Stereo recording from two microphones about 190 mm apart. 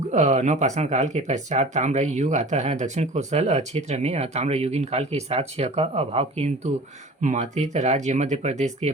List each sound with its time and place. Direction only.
0.1 s speech: 40° right (ahead or behind)